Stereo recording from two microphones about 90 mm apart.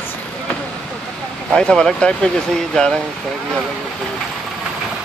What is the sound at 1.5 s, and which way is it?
Speech, 10° left (ahead or behind).